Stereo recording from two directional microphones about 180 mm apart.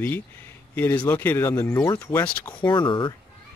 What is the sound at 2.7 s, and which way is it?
Speech, 30° left (ahead or behind).